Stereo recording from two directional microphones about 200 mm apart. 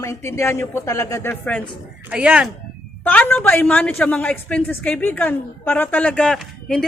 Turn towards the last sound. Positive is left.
turn(degrees=5)  # may be behind; listen again after turning